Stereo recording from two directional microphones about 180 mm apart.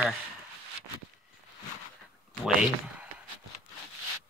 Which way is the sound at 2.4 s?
5° right (ahead or behind).